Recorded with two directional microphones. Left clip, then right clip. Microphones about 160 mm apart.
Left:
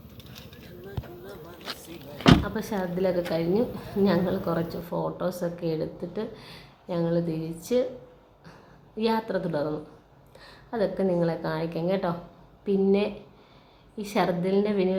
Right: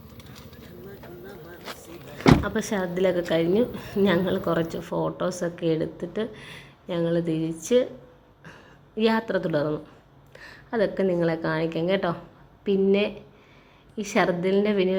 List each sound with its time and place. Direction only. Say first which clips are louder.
2.4 s speech: right 3 dB; 20° right (ahead or behind)
9.0 s a woman's voice: right 3 dB; 15° right (ahead or behind)